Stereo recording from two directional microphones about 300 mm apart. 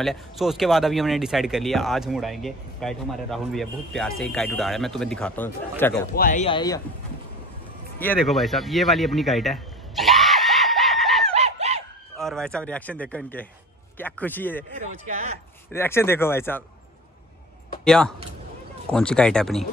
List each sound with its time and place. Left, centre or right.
0.0 s speech: centre
6.1 s speech: left
8.0 s a sound: centre
11.3 s chicken: right
12.2 s speech: centre
14.8 s speech: right
15.7 s speech: centre
17.8 s speech: centre